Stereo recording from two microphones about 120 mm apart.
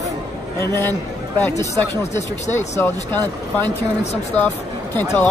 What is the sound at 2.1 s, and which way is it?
Speech, 70° left (ahead or behind).